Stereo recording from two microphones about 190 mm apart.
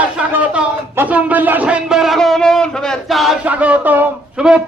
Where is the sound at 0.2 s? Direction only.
10° right (ahead or behind).